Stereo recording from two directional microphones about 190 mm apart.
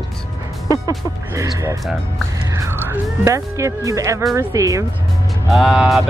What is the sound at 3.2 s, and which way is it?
Speech, 15° right (ahead or behind).